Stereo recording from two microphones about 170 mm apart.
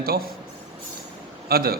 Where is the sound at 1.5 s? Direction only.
65° right (ahead or behind).